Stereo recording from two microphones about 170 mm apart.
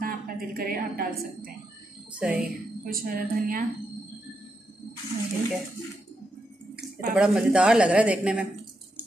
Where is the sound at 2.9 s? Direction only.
60° right (ahead or behind).